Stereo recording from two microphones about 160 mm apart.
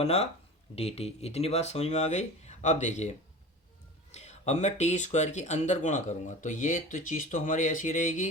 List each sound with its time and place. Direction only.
0.0 s speech: 40° left (ahead or behind)